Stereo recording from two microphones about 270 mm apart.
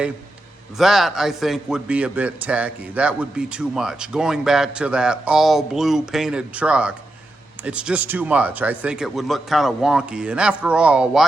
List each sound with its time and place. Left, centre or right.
0.8 s a man's voice: centre